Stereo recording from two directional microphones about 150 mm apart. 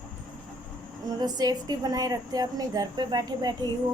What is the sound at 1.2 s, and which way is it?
A woman's voice, 25° right (ahead or behind).